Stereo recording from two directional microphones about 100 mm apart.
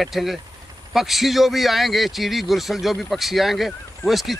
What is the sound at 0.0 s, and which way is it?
A man's voice, centre (ahead or behind).